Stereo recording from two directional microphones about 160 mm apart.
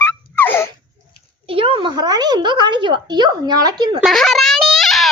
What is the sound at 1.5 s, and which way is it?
Speech, 35° right (ahead or behind).